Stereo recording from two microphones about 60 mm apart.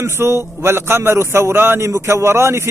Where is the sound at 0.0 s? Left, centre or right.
Right.